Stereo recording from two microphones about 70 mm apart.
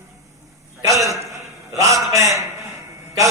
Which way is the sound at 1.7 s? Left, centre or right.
Right.